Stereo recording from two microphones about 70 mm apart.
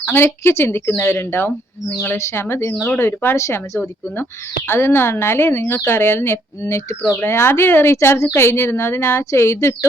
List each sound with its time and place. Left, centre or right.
0.0 s speech: left
3.3 s a woman's voice: left
3.8 s speech: left